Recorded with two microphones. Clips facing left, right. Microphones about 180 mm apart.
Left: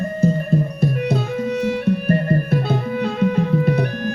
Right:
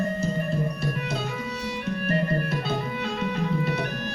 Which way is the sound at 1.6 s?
55° left (ahead or behind).